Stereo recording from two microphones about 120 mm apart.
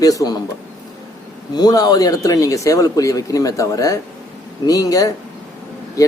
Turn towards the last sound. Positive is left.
turn(degrees=30)  # may be behind; listen again after turning